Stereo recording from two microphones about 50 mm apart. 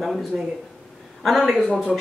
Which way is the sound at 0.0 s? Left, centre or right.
Centre.